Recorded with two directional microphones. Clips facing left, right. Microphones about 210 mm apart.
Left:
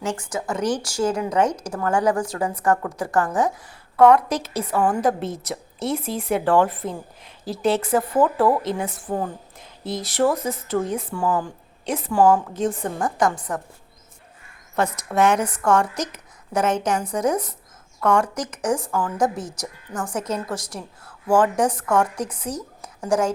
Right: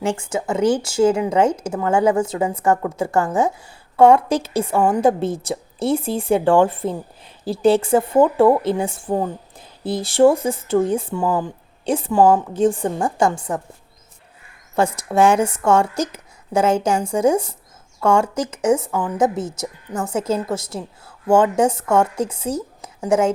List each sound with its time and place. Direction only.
0.0 s speech: 25° right (ahead or behind)
14.8 s speech: 30° right (ahead or behind)